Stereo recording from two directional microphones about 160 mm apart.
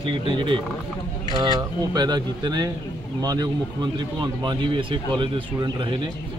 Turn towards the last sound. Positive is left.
turn(degrees=-30)  # may be behind; listen again after turning